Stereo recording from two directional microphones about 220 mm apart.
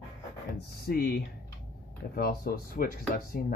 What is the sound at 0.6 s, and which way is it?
Speech, 45° left (ahead or behind).